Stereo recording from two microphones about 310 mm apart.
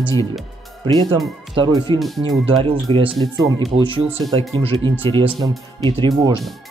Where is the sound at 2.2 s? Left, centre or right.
Centre.